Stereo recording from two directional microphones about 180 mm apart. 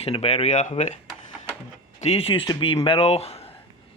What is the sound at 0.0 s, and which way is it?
Speech, 35° left (ahead or behind).